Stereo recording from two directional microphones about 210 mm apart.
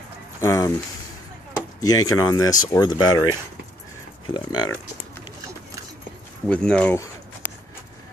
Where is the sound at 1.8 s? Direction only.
15° left (ahead or behind).